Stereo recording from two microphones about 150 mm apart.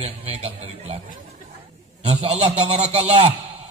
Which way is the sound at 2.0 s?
40° right (ahead or behind).